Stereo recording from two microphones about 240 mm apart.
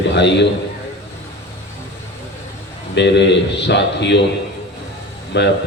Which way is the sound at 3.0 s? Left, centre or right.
Left.